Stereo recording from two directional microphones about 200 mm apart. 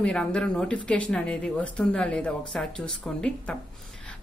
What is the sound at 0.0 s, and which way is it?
A woman's voice, 5° left (ahead or behind).